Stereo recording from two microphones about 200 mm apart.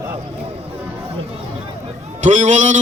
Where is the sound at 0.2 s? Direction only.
30° right (ahead or behind).